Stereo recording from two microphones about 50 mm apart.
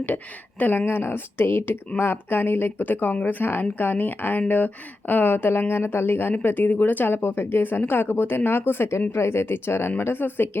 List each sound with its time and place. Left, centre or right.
0.6 s speech: left
0.9 s speech: left
8.9 s speech: left